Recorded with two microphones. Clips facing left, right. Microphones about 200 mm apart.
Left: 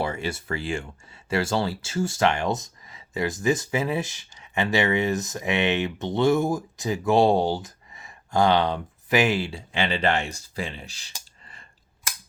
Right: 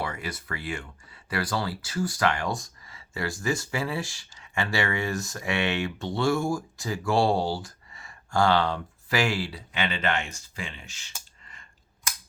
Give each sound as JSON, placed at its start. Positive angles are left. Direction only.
{"t": 0.0, "sound": "speech", "side_deg": 25}